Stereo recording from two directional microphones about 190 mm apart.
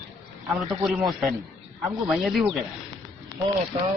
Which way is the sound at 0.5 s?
Centre (ahead or behind).